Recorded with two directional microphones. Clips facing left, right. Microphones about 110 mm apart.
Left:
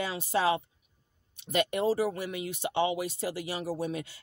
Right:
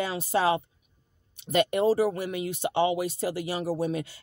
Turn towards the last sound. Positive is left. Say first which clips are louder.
# right 5 dB
turn(degrees=-40)  # may be behind; listen again after turning